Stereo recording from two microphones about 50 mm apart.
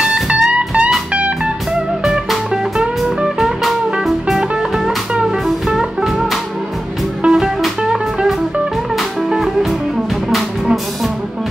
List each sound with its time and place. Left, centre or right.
0.0 s music: centre
2.0 s music: centre
5.1 s music: right
5.8 s music: centre
7.2 s music: centre
9.3 s music: centre